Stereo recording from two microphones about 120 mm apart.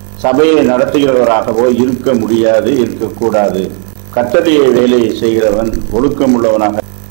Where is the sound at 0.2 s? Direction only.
20° right (ahead or behind).